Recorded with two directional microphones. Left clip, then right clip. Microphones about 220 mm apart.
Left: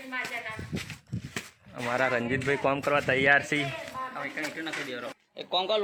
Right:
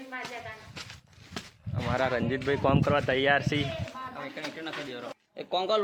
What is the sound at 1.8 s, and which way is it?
Speech, centre (ahead or behind).